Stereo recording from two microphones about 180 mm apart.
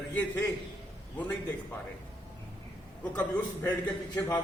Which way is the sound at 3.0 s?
10° left (ahead or behind).